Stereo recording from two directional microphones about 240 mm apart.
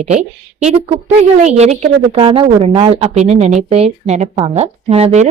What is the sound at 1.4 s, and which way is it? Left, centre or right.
A woman's voice, right.